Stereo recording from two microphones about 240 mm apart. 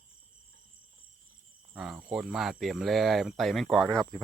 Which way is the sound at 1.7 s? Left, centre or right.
Centre.